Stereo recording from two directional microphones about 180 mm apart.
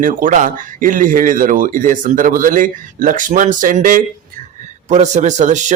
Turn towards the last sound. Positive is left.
turn(degrees=-40)  # may be behind; listen again after turning